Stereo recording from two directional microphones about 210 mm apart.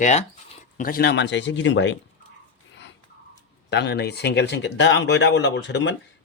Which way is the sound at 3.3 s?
55° left (ahead or behind).